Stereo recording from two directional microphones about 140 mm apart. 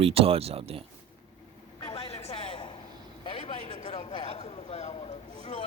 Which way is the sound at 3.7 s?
55° left (ahead or behind).